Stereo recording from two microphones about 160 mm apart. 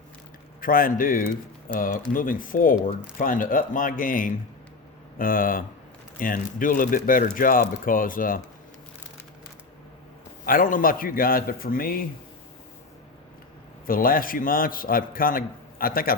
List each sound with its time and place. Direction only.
0.6 s a man's voice: 60° left (ahead or behind)
10.4 s a man's voice: 60° left (ahead or behind)
13.8 s a man's voice: 65° left (ahead or behind)